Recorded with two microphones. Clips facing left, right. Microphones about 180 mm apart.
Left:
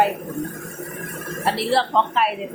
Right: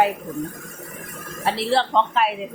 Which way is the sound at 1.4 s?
Centre (ahead or behind).